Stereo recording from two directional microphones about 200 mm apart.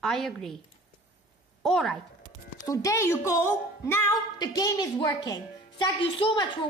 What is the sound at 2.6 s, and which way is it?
A woman's voice, 15° left (ahead or behind).